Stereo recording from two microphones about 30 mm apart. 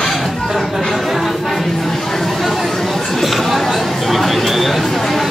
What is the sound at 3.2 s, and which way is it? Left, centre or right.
Chatter, centre.